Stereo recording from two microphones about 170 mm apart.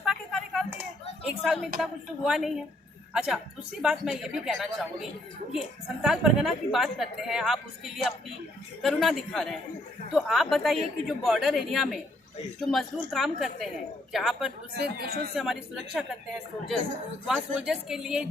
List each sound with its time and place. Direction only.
0.0 s a sound: centre (ahead or behind)
1.3 s a woman's voice: centre (ahead or behind)
14.7 s speech: 70° right (ahead or behind)
15.4 s a woman's voice: centre (ahead or behind)
17.2 s a woman's voice: 5° right (ahead or behind)